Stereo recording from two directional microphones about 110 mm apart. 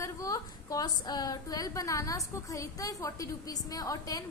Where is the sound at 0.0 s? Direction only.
30° left (ahead or behind).